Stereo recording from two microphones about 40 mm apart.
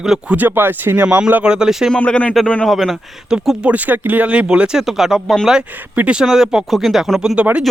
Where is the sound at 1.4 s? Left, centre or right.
Right.